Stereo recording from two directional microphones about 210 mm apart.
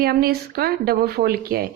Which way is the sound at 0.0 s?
45° right (ahead or behind).